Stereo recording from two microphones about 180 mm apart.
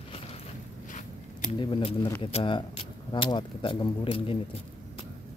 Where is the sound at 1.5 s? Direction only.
25° left (ahead or behind).